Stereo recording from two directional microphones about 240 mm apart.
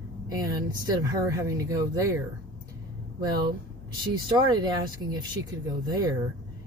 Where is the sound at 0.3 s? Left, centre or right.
Centre.